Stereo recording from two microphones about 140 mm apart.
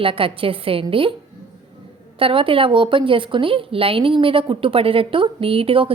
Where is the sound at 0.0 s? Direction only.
40° right (ahead or behind).